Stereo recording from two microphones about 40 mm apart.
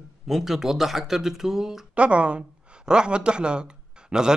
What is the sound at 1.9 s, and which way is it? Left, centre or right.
A man's voice, right.